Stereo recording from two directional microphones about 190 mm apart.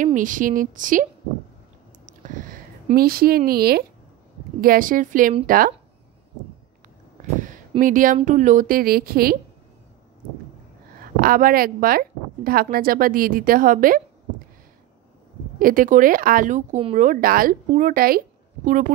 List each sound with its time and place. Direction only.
0.0 s speech: 45° right (ahead or behind)
2.0 s a sound: 45° right (ahead or behind)
4.6 s speech: 50° right (ahead or behind)
7.8 s speech: 45° right (ahead or behind)
11.0 s a woman's voice: 50° right (ahead or behind)
15.6 s speech: 45° right (ahead or behind)